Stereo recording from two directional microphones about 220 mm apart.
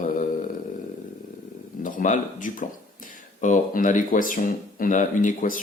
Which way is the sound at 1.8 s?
35° left (ahead or behind).